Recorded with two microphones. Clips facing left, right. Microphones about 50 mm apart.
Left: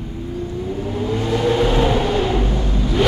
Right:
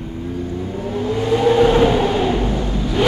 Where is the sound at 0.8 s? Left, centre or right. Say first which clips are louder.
Right 4 dB; centre.